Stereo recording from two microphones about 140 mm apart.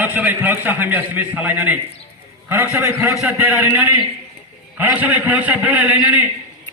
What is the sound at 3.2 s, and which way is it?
A man's voice, 10° right (ahead or behind).